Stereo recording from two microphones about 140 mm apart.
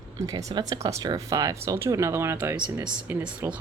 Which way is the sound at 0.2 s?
25° right (ahead or behind).